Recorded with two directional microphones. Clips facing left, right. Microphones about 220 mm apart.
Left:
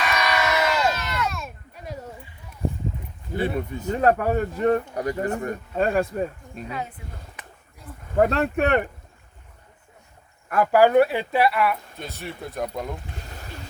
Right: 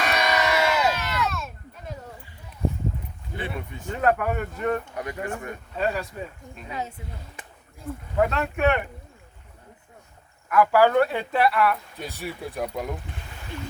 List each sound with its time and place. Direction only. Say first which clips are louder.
0.3 s crowd: even; 15° right (ahead or behind)
1.2 s a sound: even; centre (ahead or behind)
3.3 s speech: left 8 dB; 40° left (ahead or behind)
6.7 s speech: even; 25° right (ahead or behind)
8.1 s speech: left 4 dB; 40° left (ahead or behind)
10.5 s speech: left 2 dB; 20° left (ahead or behind); by 11.8 s 5° left (ahead or behind)
11.9 s speech: right 1 dB; 10° right (ahead or behind)